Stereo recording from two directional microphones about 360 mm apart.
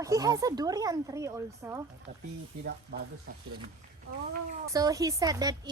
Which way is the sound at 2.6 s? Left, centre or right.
Right.